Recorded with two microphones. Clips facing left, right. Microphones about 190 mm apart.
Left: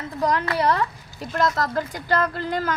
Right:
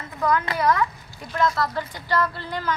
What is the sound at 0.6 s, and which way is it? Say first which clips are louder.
A child's voice: even; 30° left (ahead or behind).